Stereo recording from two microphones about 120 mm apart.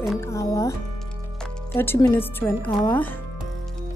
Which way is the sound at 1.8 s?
20° left (ahead or behind).